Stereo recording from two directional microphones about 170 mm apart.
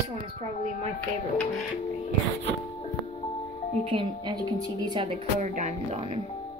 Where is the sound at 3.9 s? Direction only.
30° right (ahead or behind).